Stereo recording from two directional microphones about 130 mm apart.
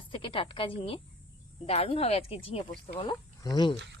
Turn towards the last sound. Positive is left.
turn(degrees=35)  # may be behind; listen again after turning